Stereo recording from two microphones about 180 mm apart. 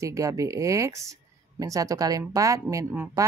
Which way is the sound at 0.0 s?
15° right (ahead or behind).